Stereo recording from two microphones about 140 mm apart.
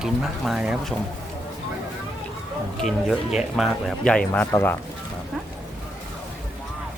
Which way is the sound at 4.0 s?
10° left (ahead or behind).